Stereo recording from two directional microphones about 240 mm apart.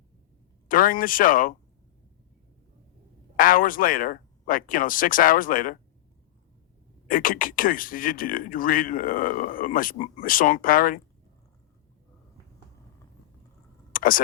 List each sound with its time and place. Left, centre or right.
0.7 s speech: left
3.3 s speech: left
7.1 s speech: left
13.9 s a sound: left